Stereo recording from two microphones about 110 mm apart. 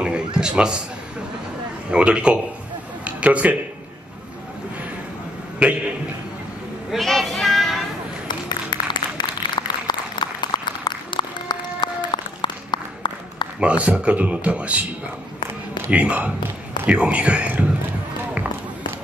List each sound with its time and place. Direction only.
0.4 s a man's voice: 5° right (ahead or behind)
1.9 s a man's voice: 10° right (ahead or behind)
5.6 s a man's voice: 10° right (ahead or behind)
6.9 s child singing: centre (ahead or behind)
8.3 s a sound: 45° left (ahead or behind)
13.6 s a man's voice: 10° right (ahead or behind)
15.9 s a man's voice: 15° right (ahead or behind)